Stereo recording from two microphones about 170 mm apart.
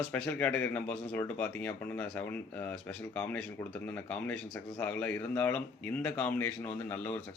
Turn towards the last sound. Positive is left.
turn(degrees=10)  # may be behind; listen again after turning